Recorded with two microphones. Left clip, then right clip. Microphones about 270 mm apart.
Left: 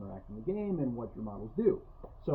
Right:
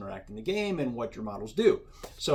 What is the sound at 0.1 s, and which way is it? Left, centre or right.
Speech, right.